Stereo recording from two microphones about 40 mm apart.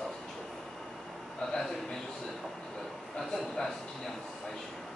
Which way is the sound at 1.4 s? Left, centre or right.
Centre.